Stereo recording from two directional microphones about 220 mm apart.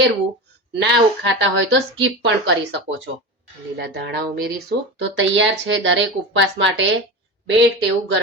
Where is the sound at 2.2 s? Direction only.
50° right (ahead or behind).